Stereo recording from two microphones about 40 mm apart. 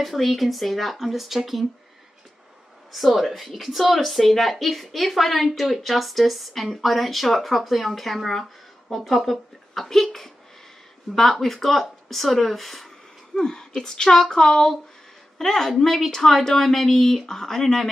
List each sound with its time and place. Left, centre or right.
0.0 s speech: centre
2.9 s speech: centre
13.4 s a woman's voice: centre